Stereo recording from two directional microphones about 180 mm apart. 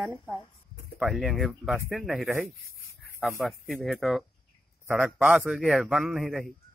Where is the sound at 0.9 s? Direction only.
Centre (ahead or behind).